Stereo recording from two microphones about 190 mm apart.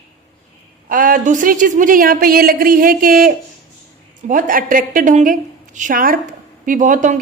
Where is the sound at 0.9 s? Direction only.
45° right (ahead or behind).